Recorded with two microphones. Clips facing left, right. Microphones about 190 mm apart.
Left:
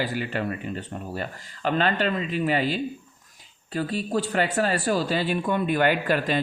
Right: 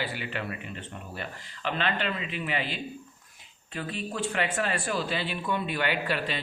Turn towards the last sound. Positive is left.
turn(degrees=45)  # may be behind; listen again after turning